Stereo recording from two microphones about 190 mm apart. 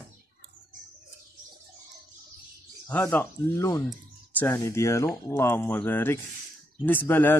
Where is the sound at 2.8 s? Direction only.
10° left (ahead or behind).